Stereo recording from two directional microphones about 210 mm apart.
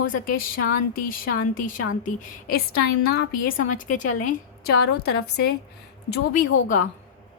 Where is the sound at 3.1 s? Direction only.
50° left (ahead or behind).